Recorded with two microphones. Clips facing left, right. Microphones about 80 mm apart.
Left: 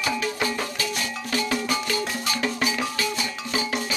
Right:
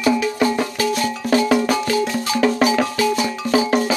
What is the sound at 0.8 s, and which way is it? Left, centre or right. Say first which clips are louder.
Music: right 9 dB; right.